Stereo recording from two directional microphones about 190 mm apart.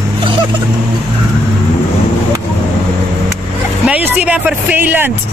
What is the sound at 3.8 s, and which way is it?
Speech, 5° right (ahead or behind).